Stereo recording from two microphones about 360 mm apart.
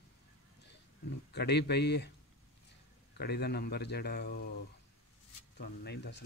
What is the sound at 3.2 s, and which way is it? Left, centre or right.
Speech, left.